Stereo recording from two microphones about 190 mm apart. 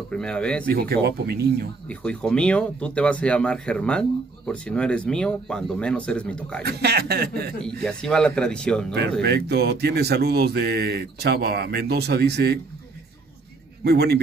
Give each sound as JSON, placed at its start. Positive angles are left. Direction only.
{"t": 0.1, "sound": "speech", "side_deg": 5}
{"t": 0.7, "sound": "speech", "side_deg": -55}
{"t": 1.9, "sound": "speech", "side_deg": 5}
{"t": 6.6, "sound": "speech", "side_deg": -55}
{"t": 7.8, "sound": "speech", "side_deg": 5}
{"t": 9.2, "sound": "speech", "side_deg": -60}
{"t": 13.8, "sound": "speech", "side_deg": -55}